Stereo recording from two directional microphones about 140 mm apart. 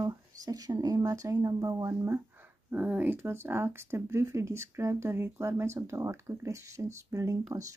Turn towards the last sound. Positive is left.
turn(degrees=-25)  # may be behind; listen again after turning